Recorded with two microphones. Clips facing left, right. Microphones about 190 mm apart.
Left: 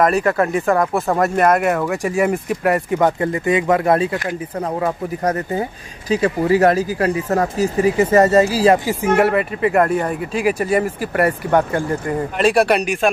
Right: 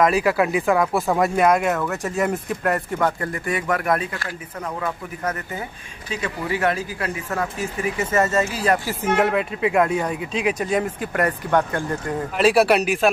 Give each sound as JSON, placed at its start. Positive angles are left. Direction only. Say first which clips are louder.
{"t": 0.0, "sound": "speech", "louder": "left 2 dB", "side_deg": -5}
{"t": 8.7, "sound": "speech", "louder": "left 5 dB", "side_deg": 15}